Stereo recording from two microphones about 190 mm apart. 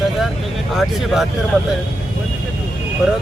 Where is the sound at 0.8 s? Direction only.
Centre (ahead or behind).